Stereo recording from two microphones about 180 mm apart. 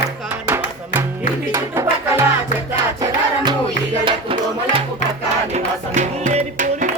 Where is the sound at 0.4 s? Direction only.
15° right (ahead or behind).